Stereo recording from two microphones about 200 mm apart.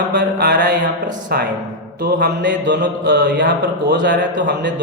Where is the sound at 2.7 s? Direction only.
60° right (ahead or behind).